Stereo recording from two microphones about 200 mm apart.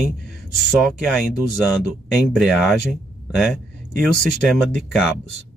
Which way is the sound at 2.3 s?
Centre (ahead or behind).